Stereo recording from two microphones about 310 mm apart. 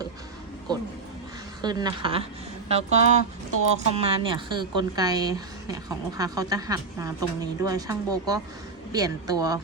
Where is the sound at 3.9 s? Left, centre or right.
Centre.